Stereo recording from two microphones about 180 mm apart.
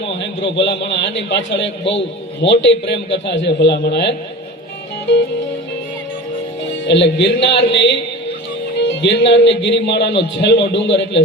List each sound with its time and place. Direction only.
0.2 s a man's voice: 85° left
6.8 s a man's voice: 80° left